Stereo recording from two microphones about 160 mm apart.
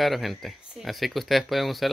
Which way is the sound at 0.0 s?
Centre (ahead or behind).